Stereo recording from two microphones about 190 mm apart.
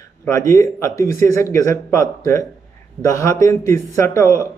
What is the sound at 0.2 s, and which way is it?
A man's voice, 15° left (ahead or behind).